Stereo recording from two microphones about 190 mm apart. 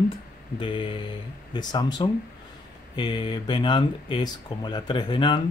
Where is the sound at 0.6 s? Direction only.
25° left (ahead or behind).